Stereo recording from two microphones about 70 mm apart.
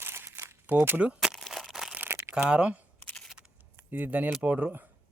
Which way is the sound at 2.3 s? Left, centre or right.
Centre.